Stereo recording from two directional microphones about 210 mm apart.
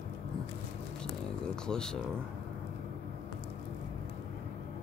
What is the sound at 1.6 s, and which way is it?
Speech, 5° left (ahead or behind).